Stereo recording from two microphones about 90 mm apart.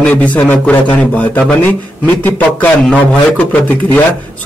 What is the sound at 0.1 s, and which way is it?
A man's voice, 15° left (ahead or behind).